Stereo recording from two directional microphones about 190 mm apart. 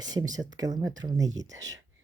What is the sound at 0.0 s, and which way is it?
Speech, 20° right (ahead or behind).